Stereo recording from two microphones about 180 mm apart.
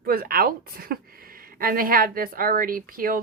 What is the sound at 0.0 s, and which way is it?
Speech, 55° right (ahead or behind).